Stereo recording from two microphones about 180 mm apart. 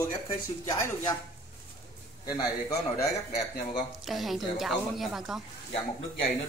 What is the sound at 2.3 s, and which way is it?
Speech, 20° left (ahead or behind).